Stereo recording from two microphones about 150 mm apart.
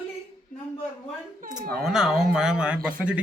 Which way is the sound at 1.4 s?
55° right (ahead or behind).